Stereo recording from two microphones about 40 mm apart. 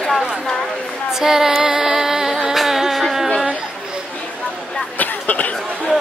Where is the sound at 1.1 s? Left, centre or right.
Centre.